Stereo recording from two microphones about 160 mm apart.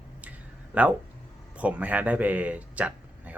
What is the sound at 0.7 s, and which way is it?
A man's voice, 10° right (ahead or behind).